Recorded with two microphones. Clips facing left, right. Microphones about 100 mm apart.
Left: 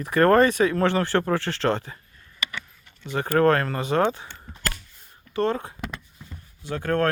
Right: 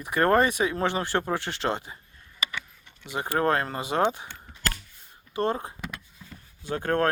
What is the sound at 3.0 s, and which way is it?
Speech, 15° right (ahead or behind).